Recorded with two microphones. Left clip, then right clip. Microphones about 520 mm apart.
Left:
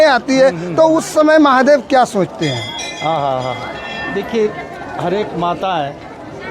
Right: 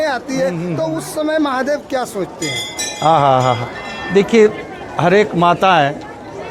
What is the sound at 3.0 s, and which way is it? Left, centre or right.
A man's voice, right.